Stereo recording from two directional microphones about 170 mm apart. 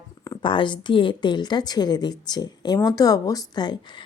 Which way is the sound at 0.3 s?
30° left (ahead or behind).